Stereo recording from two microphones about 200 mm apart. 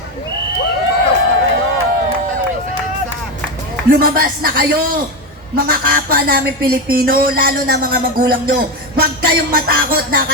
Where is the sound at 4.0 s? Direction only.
45° right (ahead or behind).